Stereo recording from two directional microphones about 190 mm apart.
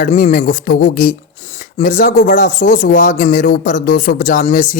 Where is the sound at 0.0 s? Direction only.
45° left (ahead or behind).